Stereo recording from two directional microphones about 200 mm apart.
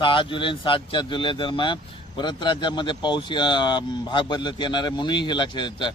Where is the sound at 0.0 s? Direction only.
25° left (ahead or behind).